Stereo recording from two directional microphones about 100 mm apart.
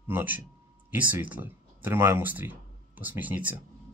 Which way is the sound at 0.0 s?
20° right (ahead or behind).